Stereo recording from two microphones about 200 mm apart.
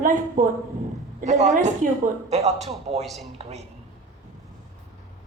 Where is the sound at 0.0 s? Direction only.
40° right (ahead or behind).